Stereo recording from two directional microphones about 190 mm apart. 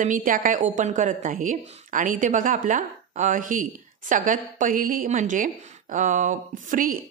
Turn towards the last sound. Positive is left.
turn(degrees=-45)  # may be behind; listen again after turning